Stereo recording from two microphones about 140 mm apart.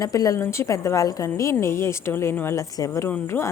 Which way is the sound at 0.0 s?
25° left (ahead or behind).